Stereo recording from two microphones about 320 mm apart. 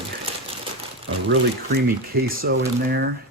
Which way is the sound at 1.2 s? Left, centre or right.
Right.